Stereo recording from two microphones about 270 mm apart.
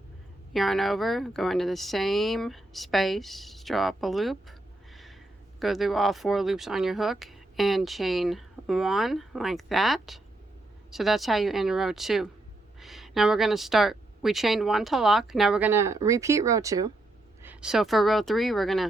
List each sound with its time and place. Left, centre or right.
0.5 s speech: centre
5.5 s speech: centre